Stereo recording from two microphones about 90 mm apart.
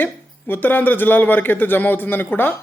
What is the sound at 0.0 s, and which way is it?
Speech, 20° left (ahead or behind).